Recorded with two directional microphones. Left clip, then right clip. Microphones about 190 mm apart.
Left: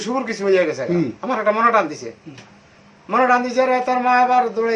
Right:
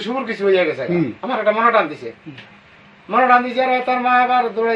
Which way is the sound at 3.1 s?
5° left (ahead or behind).